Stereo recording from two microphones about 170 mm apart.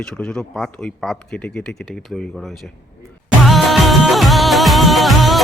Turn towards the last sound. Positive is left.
turn(degrees=0)  # may be behind; listen again after turning